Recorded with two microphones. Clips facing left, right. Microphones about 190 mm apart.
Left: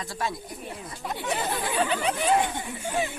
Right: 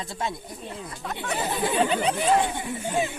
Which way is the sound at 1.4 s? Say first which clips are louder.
Right 5 dB; 10° right (ahead or behind).